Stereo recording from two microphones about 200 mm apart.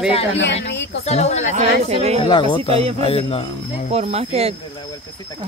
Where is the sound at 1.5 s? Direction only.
35° right (ahead or behind).